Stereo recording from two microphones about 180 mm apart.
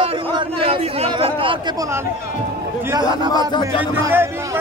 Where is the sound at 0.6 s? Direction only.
30° right (ahead or behind).